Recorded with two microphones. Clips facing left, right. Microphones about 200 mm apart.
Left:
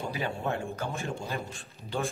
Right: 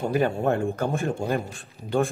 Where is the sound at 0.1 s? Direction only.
50° right (ahead or behind).